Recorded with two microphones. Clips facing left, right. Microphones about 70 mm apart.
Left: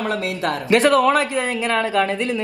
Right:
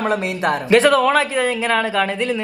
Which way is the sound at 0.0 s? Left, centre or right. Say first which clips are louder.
Right 3 dB; right.